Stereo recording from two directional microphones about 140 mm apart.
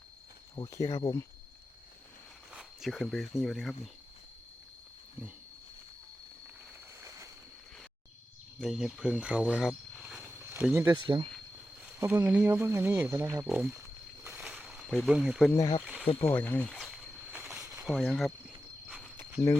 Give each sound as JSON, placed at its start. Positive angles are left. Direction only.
{"t": 0.5, "sound": "speech", "side_deg": 25}
{"t": 2.5, "sound": "speech", "side_deg": 0}
{"t": 8.6, "sound": "speech", "side_deg": 0}
{"t": 10.5, "sound": "speech", "side_deg": -20}
{"t": 10.9, "sound": "speech", "side_deg": -35}
{"t": 11.9, "sound": "speech", "side_deg": -20}
{"t": 14.3, "sound": "a sound", "side_deg": -5}
{"t": 15.5, "sound": "speech", "side_deg": 25}
{"t": 15.8, "sound": "insect", "side_deg": -5}
{"t": 16.2, "sound": "speech", "side_deg": 15}
{"t": 16.7, "sound": "a sound", "side_deg": 0}
{"t": 17.3, "sound": "a sound", "side_deg": -10}
{"t": 18.0, "sound": "cricket", "side_deg": 5}